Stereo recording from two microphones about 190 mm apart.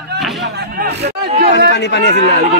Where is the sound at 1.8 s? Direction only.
65° left (ahead or behind).